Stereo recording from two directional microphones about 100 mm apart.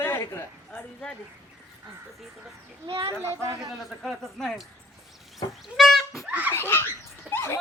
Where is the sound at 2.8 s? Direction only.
60° right (ahead or behind).